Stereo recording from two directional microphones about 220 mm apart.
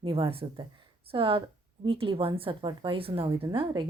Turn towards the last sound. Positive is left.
turn(degrees=-20)  # may be behind; listen again after turning